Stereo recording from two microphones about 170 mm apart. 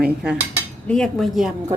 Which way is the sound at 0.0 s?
5° right (ahead or behind).